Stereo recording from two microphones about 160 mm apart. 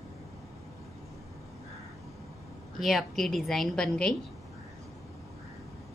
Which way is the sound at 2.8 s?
Centre (ahead or behind).